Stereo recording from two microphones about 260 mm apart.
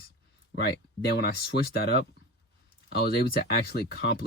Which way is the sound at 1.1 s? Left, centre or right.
Left.